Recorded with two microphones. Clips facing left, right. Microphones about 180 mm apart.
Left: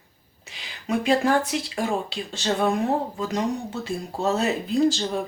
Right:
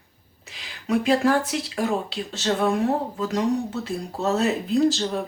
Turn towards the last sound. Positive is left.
turn(degrees=0)  # may be behind; listen again after turning